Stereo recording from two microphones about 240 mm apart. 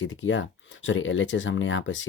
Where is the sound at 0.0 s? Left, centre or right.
Left.